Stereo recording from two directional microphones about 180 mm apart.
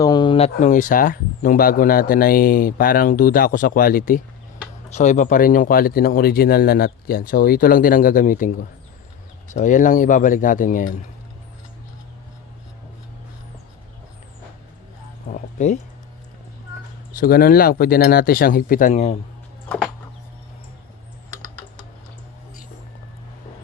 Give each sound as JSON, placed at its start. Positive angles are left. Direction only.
{"t": 0.0, "sound": "speech", "side_deg": 25}
{"t": 15.3, "sound": "a sound", "side_deg": 45}
{"t": 17.2, "sound": "speech", "side_deg": 55}